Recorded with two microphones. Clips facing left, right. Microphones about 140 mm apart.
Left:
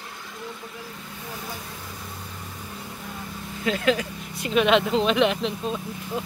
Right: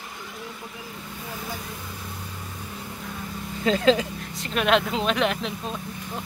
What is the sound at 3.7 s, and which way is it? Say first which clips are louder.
Speech: right 3 dB; 30° right (ahead or behind).